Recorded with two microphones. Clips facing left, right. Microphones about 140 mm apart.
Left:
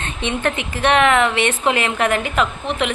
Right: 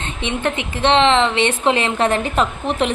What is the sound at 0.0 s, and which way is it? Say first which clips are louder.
A woman's voice: even; 20° right (ahead or behind).